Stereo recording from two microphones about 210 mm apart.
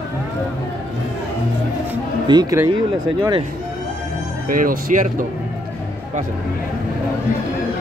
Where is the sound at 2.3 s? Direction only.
15° right (ahead or behind).